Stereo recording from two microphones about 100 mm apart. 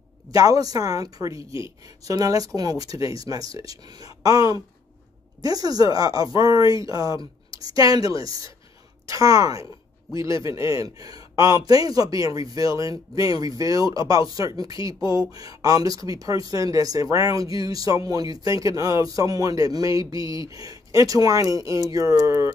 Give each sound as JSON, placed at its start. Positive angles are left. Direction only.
{"t": 0.3, "sound": "speech", "side_deg": -35}